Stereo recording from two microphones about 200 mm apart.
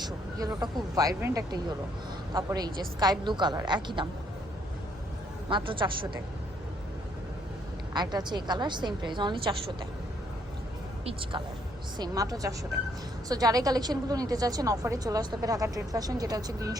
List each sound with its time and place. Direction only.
0.0 s a woman's voice: 20° right (ahead or behind)
5.5 s a woman's voice: 25° right (ahead or behind)
7.9 s a woman's voice: 20° right (ahead or behind)
11.0 s a woman's voice: 25° right (ahead or behind)